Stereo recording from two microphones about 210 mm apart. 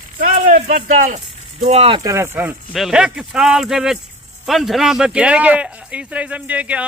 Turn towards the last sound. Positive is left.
turn(degrees=-5)  # may be behind; listen again after turning